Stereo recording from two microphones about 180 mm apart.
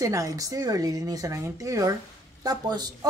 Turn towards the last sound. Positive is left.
turn(degrees=-20)  # may be behind; listen again after turning